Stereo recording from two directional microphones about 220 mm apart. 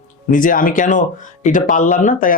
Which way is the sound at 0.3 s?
40° left (ahead or behind).